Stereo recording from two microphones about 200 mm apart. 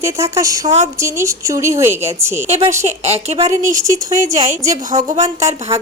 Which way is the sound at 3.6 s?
15° right (ahead or behind).